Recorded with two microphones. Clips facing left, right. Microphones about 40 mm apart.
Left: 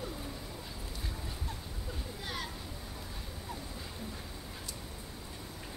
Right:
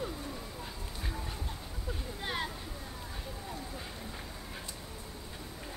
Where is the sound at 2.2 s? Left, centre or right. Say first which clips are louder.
Right 5 dB; right.